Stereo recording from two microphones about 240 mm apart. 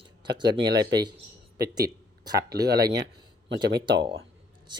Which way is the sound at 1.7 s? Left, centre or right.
Centre.